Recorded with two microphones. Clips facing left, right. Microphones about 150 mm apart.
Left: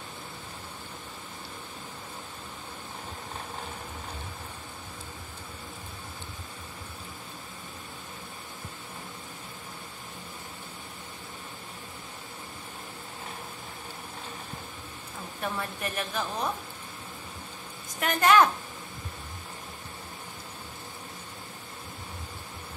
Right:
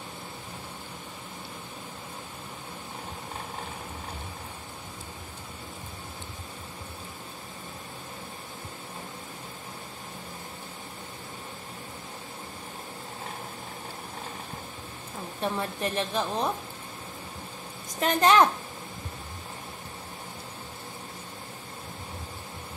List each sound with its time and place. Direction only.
15.4 s a woman's voice: 25° right (ahead or behind)
17.9 s a woman's voice: 25° right (ahead or behind)